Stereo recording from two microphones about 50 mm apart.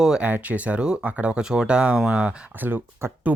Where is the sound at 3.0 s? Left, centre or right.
Right.